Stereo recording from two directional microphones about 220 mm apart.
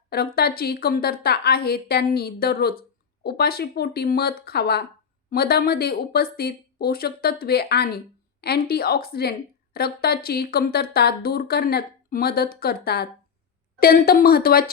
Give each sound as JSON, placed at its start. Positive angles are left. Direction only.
{"t": 0.3, "sound": "speech", "side_deg": 45}